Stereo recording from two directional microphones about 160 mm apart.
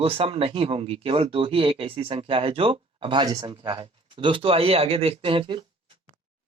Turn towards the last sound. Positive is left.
turn(degrees=-30)  # may be behind; listen again after turning